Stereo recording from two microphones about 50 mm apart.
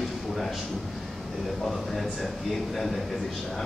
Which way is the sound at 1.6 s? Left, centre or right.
Centre.